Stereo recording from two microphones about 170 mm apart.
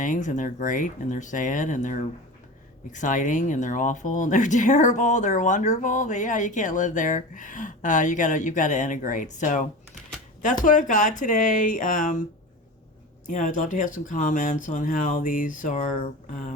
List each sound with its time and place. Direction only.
0.0 s speech: 50° left (ahead or behind)
13.2 s speech: 50° left (ahead or behind)